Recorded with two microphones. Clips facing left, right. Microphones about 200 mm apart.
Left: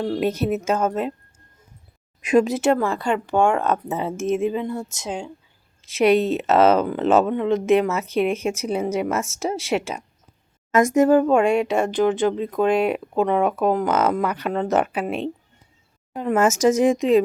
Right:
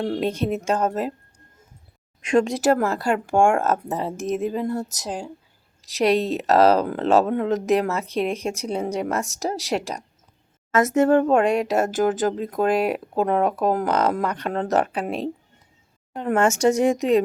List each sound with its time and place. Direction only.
0.2 s speech: 5° left (ahead or behind)
2.2 s speech: 5° left (ahead or behind)
4.8 s speech: 40° right (ahead or behind)
5.0 s speech: 5° right (ahead or behind)
6.0 s speech: 35° right (ahead or behind)
6.6 s speech: centre (ahead or behind)
8.0 s speech: 35° right (ahead or behind)
8.3 s speech: centre (ahead or behind)
10.7 s speech: 15° left (ahead or behind)
11.1 s speech: centre (ahead or behind)
11.8 s speech: 45° right (ahead or behind)
12.6 s speech: centre (ahead or behind)